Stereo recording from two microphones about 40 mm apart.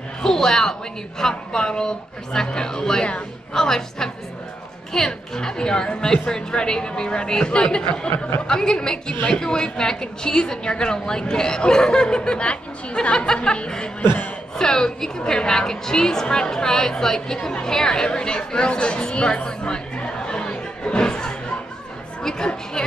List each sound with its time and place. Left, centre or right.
0.2 s a sound: centre
1.2 s a woman's voice: centre
22.8 s speech: centre